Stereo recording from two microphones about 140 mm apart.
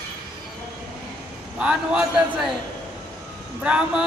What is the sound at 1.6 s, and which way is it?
Speech, 5° right (ahead or behind).